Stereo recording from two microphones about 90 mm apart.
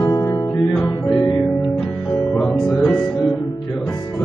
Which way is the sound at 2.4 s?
10° left (ahead or behind).